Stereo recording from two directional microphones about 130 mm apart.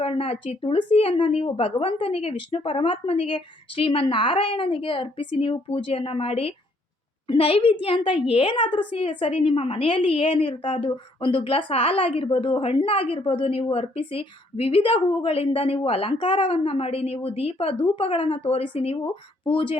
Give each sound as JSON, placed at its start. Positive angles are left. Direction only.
{"t": 0.0, "sound": "a woman's voice", "side_deg": 45}